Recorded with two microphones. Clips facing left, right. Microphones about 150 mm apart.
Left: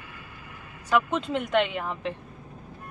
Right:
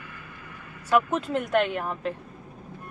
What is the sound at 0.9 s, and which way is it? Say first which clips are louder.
Speech: right 1 dB; 5° right (ahead or behind).